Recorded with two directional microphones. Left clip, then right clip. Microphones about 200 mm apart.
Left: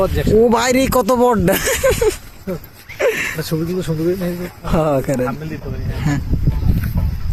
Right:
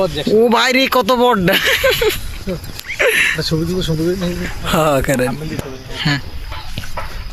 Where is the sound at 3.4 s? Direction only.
45° right (ahead or behind).